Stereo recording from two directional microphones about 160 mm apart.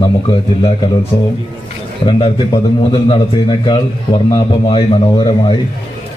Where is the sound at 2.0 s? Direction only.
30° left (ahead or behind).